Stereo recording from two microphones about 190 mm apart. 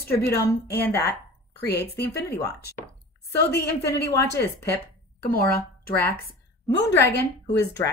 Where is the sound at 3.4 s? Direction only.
55° left (ahead or behind).